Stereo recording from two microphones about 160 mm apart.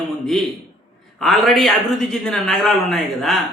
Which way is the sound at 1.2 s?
Centre (ahead or behind).